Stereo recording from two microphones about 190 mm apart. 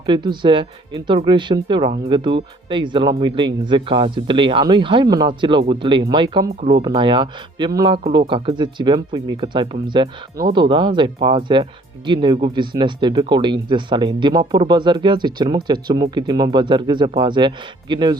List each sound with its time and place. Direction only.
0.0 s speech: 25° right (ahead or behind)